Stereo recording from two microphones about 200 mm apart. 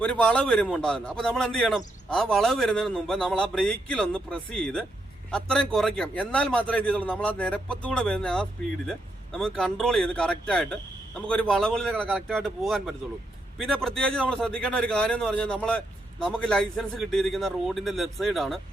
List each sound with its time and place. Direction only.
0.0 s a man's voice: 5° left (ahead or behind)